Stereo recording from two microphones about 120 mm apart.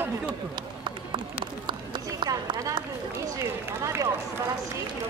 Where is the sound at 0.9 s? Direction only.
40° right (ahead or behind).